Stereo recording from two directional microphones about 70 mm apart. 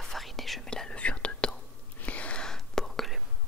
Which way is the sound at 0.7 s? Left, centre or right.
Centre.